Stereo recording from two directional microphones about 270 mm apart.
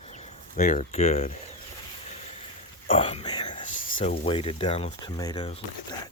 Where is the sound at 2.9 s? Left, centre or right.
Centre.